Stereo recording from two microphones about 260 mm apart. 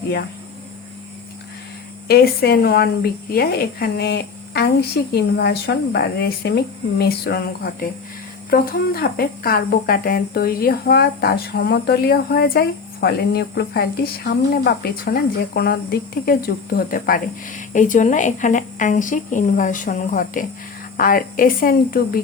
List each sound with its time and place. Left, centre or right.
2.0 s a woman's voice: left